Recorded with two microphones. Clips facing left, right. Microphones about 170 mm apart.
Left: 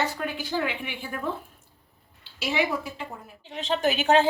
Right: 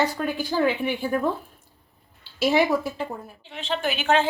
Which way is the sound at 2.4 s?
40° right (ahead or behind).